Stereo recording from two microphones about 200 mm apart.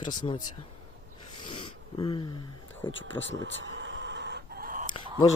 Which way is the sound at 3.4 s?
65° right (ahead or behind).